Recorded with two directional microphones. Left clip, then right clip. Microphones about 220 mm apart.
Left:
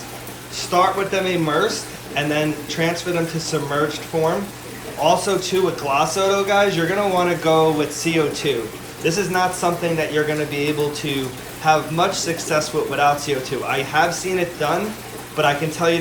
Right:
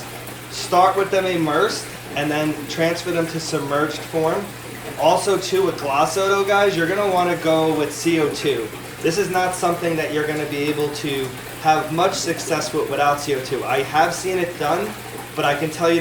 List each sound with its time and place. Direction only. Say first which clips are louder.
0.5 s speech: right 2 dB; centre (ahead or behind)
5.0 s speech: right 1 dB; centre (ahead or behind)